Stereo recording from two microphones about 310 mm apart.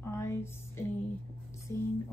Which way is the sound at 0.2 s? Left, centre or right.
Centre.